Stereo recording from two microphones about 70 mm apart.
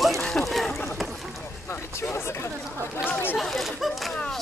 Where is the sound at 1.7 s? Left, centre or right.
Left.